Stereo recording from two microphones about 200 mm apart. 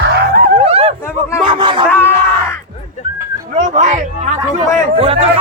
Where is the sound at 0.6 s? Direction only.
30° right (ahead or behind).